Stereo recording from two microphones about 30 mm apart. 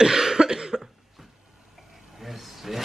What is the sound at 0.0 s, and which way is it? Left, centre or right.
Cough, centre.